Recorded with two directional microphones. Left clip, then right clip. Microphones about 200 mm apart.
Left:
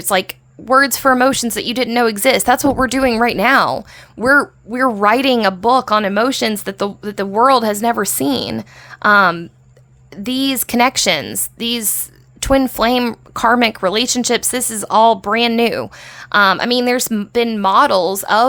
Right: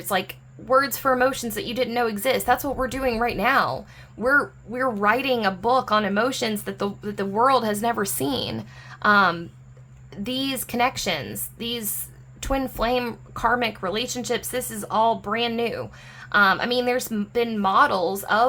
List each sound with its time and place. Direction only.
0.0 s speech: 45° left (ahead or behind)